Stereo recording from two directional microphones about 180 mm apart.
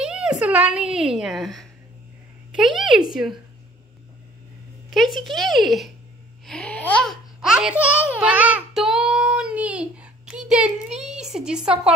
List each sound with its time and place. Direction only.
0.0 s a woman's voice: 5° right (ahead or behind)
2.8 s a child's voice: 5° right (ahead or behind)
4.9 s a child's voice: centre (ahead or behind)